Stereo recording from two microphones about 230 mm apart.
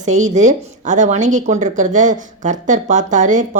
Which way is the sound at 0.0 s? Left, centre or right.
Right.